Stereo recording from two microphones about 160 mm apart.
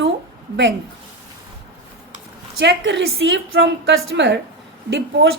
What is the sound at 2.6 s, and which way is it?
A woman's voice, 90° right.